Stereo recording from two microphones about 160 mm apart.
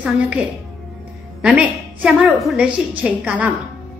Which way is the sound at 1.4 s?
5° right (ahead or behind).